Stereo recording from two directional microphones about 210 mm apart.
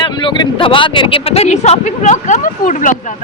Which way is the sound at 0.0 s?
25° left (ahead or behind).